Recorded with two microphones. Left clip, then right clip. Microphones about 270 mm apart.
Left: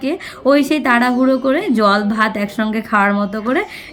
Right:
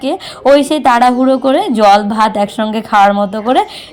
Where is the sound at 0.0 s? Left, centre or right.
Centre.